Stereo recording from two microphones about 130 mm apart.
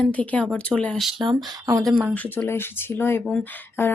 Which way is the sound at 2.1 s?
15° left (ahead or behind).